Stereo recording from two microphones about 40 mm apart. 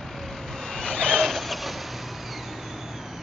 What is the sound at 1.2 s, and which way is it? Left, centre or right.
Vehicle, centre.